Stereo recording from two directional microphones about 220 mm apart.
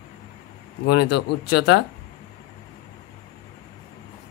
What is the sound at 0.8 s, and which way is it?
Speech, 90° left.